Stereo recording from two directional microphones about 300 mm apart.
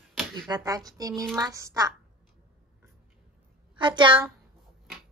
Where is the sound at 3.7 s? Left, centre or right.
Centre.